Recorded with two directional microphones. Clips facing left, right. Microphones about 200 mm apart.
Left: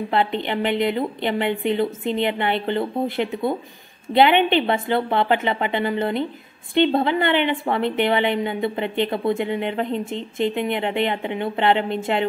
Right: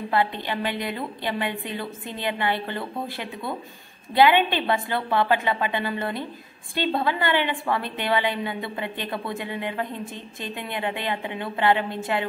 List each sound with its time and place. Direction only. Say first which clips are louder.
0.1 s a woman's voice: left 2 dB; 25° left (ahead or behind)